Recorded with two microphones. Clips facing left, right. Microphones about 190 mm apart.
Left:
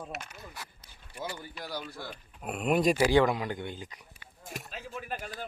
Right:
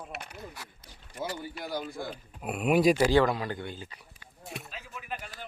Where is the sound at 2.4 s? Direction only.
5° right (ahead or behind).